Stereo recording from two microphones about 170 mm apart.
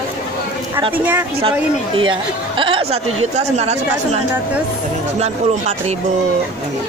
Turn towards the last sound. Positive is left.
turn(degrees=-40)  # may be behind; listen again after turning